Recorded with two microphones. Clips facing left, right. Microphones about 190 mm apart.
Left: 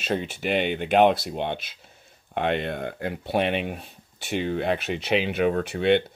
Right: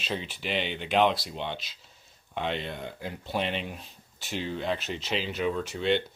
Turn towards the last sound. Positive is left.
turn(degrees=60)  # may be behind; listen again after turning